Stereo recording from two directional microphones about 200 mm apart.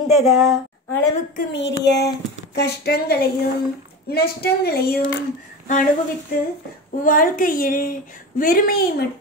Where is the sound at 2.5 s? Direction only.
55° left (ahead or behind).